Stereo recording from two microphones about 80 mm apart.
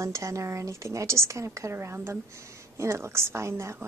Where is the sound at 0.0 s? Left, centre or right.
Right.